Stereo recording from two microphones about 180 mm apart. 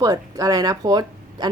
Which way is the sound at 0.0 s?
20° right (ahead or behind).